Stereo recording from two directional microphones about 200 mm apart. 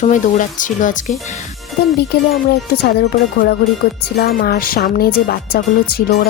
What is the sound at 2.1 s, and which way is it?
Speech, 55° left (ahead or behind).